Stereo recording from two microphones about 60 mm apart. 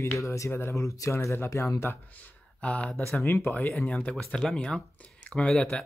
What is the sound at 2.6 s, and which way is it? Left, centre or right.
Speech, left.